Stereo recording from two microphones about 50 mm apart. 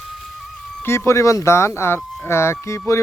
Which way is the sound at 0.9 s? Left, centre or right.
Left.